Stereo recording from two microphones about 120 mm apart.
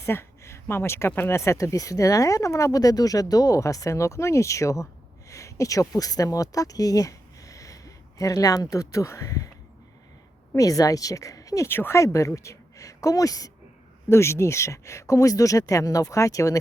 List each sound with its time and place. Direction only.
0.0 s speech: 20° left (ahead or behind)
10.5 s speech: 30° left (ahead or behind)